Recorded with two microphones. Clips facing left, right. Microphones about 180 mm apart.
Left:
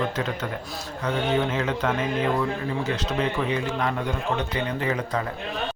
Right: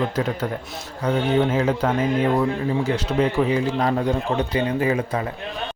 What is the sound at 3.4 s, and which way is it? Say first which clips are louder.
Speech: right 6 dB; 35° right (ahead or behind).